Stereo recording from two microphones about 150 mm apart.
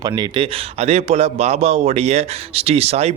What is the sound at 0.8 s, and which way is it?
A man's voice, 45° right (ahead or behind).